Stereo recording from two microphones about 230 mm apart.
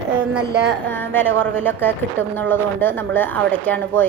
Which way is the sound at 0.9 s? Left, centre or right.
Centre.